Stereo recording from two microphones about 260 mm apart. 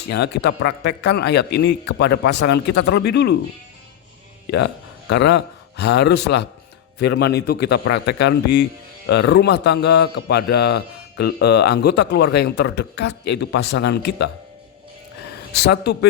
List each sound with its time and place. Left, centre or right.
0.1 s a man's voice: left
4.5 s a man's voice: left
15.5 s a man's voice: left